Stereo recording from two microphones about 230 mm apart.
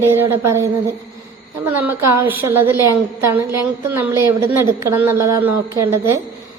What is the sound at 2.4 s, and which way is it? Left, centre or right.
A woman's voice, centre.